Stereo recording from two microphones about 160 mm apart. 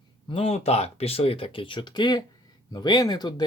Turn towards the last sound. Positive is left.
turn(degrees=25)  # may be behind; listen again after turning